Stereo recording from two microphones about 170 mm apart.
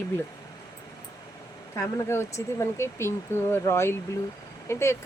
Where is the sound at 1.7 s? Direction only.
15° left (ahead or behind).